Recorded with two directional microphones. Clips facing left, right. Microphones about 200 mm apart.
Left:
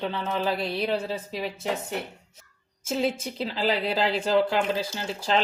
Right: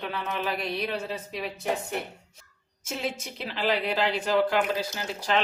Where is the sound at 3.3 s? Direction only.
35° left (ahead or behind).